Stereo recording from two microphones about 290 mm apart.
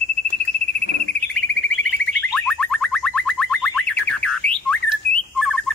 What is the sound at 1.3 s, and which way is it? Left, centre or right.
Bird, centre.